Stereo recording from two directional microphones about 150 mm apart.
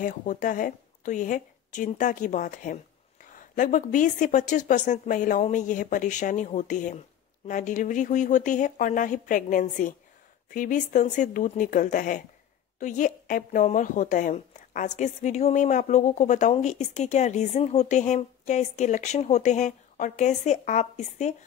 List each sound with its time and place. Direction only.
0.0 s a woman's voice: 60° left (ahead or behind)